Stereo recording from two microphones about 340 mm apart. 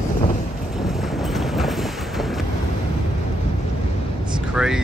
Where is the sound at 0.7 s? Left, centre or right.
Centre.